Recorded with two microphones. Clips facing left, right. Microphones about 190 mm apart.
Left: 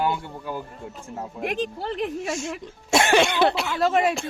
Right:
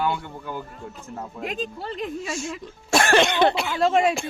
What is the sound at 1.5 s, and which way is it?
Speech, 70° left (ahead or behind).